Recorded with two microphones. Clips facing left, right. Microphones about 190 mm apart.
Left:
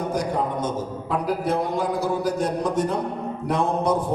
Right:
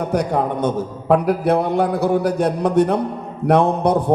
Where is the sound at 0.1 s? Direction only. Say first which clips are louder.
Right 6 dB; 65° right (ahead or behind).